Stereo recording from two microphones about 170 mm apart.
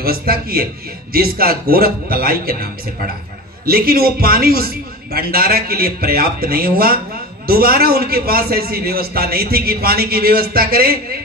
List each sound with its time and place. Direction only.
0.0 s a man's voice: 65° right (ahead or behind)